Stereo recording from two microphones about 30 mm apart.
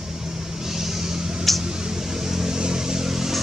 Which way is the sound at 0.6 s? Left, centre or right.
Centre.